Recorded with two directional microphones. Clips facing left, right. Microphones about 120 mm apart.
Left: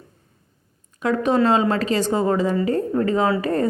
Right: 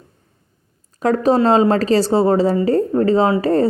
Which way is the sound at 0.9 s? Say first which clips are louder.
Right 4 dB; 40° right (ahead or behind).